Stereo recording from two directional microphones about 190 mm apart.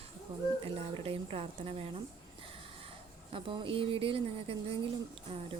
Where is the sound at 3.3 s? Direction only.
25° right (ahead or behind).